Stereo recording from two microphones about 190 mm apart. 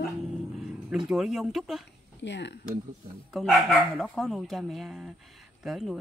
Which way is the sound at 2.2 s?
65° left (ahead or behind).